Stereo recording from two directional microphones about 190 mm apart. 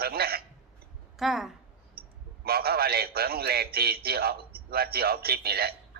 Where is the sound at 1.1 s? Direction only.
Centre (ahead or behind).